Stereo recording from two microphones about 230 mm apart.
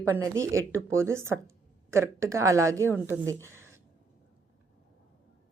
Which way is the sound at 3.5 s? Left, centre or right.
Centre.